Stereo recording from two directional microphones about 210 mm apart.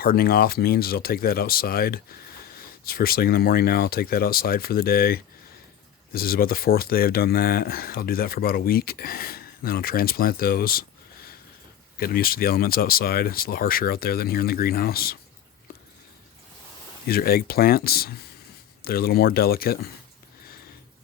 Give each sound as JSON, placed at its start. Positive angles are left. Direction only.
{"t": 0.0, "sound": "speech", "side_deg": 45}
{"t": 17.1, "sound": "speech", "side_deg": 45}